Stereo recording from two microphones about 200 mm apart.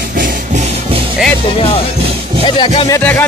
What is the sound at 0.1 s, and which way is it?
Music, 45° right (ahead or behind).